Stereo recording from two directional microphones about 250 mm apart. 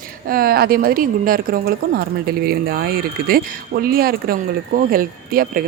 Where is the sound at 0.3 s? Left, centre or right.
Right.